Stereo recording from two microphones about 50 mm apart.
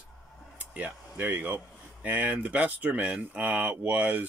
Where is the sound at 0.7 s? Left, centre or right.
Right.